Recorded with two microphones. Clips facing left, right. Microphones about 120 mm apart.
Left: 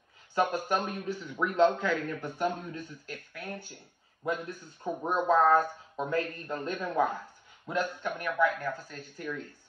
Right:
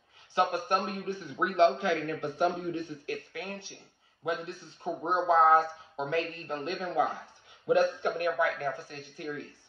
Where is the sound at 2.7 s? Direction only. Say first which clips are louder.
Right 6 dB; 65° right (ahead or behind).